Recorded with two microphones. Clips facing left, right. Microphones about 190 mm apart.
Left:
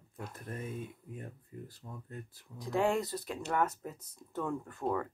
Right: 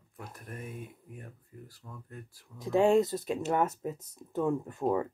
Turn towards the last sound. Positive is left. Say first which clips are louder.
# right 5 dB
turn(degrees=-20)  # may be behind; listen again after turning